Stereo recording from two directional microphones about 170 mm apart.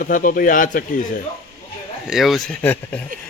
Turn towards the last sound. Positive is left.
turn(degrees=10)  # may be behind; listen again after turning